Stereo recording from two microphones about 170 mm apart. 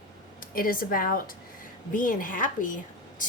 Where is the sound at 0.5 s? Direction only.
55° left (ahead or behind).